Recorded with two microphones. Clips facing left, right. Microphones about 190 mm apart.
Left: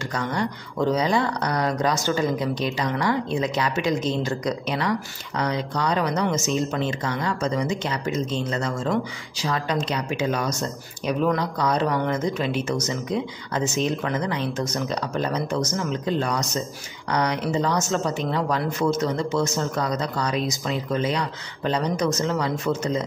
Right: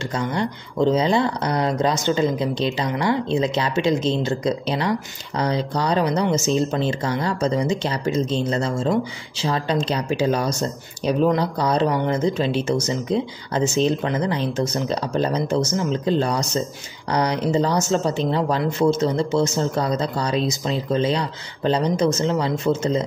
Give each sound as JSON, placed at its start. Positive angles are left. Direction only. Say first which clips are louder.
{"t": 0.1, "sound": "a woman's voice", "louder": "right 2 dB", "side_deg": -25}